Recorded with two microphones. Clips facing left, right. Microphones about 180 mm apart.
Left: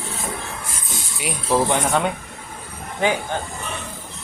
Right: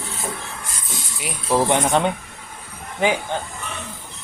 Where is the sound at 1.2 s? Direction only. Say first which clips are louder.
Left 1 dB; centre (ahead or behind).